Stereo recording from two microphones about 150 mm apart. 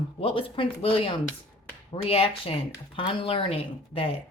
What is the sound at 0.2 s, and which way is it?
Speech, 35° left (ahead or behind).